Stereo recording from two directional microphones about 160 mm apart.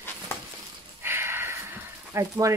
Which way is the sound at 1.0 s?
15° right (ahead or behind).